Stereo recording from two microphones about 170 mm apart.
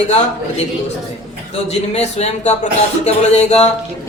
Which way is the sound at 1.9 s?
40° left (ahead or behind).